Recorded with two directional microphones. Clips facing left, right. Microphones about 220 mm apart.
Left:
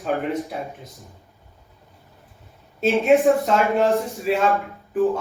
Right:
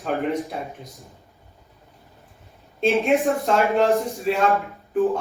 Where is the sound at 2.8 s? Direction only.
Centre (ahead or behind).